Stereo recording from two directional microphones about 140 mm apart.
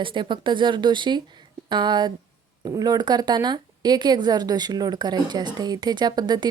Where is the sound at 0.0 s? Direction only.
35° right (ahead or behind).